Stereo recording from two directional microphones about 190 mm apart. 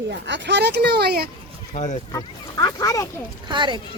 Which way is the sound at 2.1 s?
15° left (ahead or behind).